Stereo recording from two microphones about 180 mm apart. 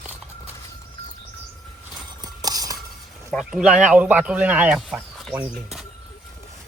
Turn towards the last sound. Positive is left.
turn(degrees=-5)  # may be behind; listen again after turning